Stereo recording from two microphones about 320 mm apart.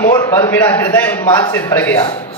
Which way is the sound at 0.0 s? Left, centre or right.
Centre.